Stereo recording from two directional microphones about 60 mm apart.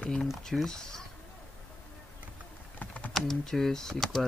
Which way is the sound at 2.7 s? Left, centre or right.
Left.